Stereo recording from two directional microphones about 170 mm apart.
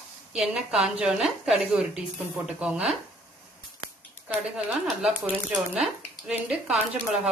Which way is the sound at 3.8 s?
20° left (ahead or behind).